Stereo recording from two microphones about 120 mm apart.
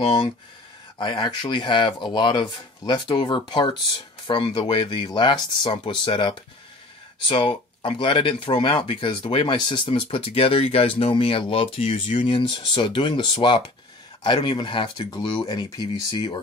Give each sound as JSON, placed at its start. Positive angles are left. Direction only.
{"t": 0.0, "sound": "speech", "side_deg": 45}